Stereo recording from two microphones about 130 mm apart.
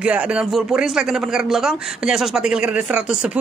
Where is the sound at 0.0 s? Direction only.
10° right (ahead or behind).